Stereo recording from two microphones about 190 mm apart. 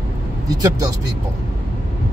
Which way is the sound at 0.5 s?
20° right (ahead or behind).